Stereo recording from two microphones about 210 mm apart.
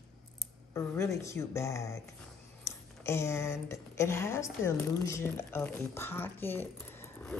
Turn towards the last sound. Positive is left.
turn(degrees=10)  # may be behind; listen again after turning